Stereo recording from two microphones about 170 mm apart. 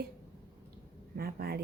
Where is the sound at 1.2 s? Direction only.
65° right (ahead or behind).